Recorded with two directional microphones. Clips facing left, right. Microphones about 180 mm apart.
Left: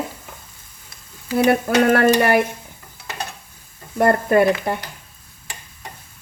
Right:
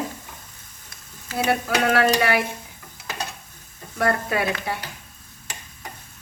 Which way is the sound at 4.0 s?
50° left (ahead or behind).